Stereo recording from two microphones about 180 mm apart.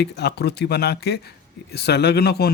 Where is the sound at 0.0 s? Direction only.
65° left (ahead or behind).